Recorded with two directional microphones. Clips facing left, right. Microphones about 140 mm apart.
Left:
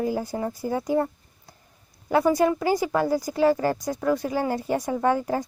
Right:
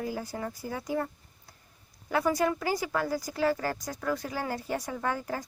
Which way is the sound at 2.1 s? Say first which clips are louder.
Left 7 dB; 25° left (ahead or behind).